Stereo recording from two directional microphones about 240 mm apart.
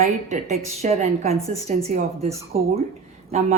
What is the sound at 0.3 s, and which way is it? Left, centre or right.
A woman's voice, right.